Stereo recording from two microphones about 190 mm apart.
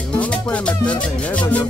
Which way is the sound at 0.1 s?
5° left (ahead or behind).